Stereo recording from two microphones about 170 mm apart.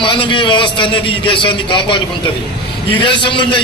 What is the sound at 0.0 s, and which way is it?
A man's voice, 30° left (ahead or behind).